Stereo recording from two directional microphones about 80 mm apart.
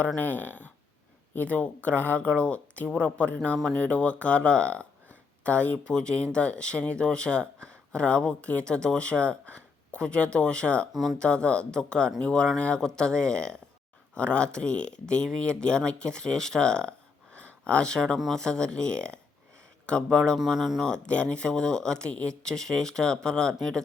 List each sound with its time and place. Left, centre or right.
0.2 s speech: left
10.9 s speech: centre
11.2 s speech: centre
20.4 s speech: centre
20.8 s speech: centre